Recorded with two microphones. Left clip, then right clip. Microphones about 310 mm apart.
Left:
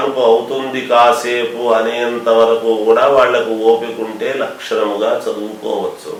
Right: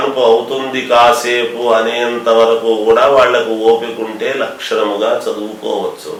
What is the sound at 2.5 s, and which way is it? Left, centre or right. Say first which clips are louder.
Speech: right 1 dB; left.